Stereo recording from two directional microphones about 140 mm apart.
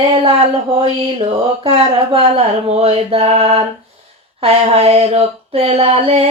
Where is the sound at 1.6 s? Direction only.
40° right (ahead or behind).